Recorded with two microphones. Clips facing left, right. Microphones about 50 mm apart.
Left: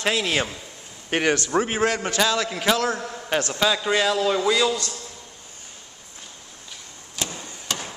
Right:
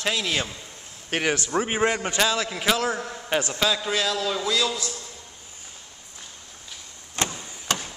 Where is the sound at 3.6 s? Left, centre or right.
Centre.